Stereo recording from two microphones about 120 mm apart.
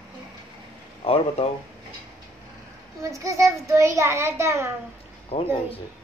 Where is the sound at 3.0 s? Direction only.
25° right (ahead or behind).